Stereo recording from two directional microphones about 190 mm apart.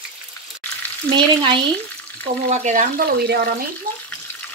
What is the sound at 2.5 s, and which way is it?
Speech, 40° right (ahead or behind).